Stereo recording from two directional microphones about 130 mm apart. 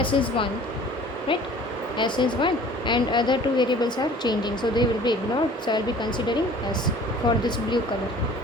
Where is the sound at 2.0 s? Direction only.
35° left (ahead or behind).